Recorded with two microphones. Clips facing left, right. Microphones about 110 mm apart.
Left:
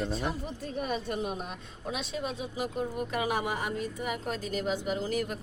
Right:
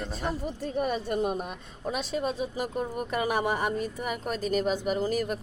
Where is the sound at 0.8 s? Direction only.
45° right (ahead or behind).